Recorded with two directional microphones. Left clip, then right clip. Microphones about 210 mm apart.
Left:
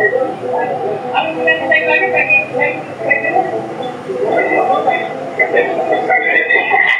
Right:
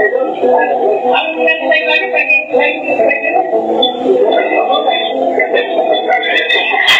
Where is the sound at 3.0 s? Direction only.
60° right (ahead or behind).